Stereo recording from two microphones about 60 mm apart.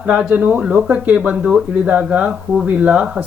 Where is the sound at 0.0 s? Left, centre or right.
Right.